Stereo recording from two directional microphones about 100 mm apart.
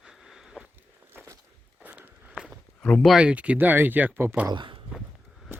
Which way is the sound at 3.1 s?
10° right (ahead or behind).